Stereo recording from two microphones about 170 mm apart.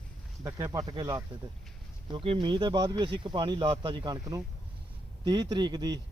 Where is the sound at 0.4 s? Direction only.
20° right (ahead or behind).